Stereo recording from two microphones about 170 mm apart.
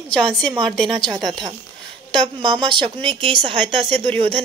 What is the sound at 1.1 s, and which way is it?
A woman's voice, 25° right (ahead or behind).